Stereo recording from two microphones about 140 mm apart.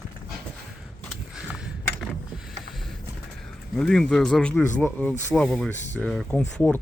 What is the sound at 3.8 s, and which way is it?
Speech, 5° left (ahead or behind).